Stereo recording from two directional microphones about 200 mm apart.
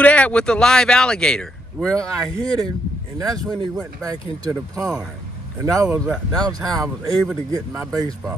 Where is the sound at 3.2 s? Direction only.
20° right (ahead or behind).